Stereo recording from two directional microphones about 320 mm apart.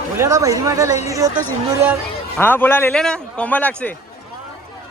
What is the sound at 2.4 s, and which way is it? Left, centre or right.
A man's voice, centre.